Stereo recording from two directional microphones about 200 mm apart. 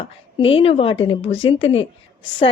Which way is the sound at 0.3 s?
30° left (ahead or behind).